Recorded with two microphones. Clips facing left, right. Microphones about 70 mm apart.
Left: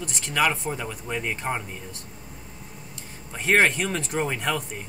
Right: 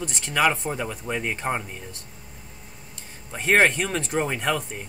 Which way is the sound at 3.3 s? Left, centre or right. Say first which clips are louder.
Right 1 dB; centre.